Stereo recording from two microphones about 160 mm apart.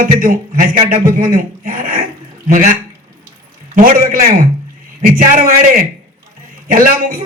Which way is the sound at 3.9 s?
60° right (ahead or behind).